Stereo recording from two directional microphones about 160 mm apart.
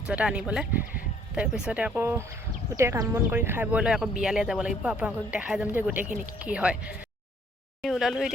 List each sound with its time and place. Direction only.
0.1 s speech: 5° right (ahead or behind)